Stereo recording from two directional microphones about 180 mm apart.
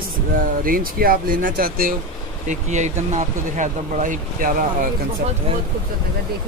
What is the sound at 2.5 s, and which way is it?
Speech, 40° right (ahead or behind).